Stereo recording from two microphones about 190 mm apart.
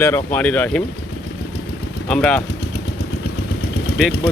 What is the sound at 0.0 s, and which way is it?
Speech, 10° left (ahead or behind).